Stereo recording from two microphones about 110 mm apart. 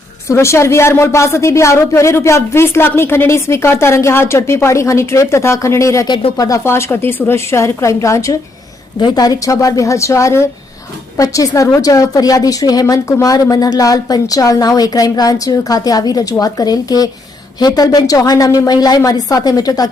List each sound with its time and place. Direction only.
0.3 s speech: 25° left (ahead or behind)
9.0 s a woman's voice: 40° left (ahead or behind)